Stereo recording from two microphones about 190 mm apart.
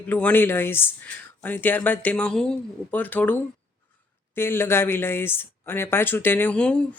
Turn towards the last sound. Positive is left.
turn(degrees=5)  # may be behind; listen again after turning